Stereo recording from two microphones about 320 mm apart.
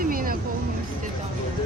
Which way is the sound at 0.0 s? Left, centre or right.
Right.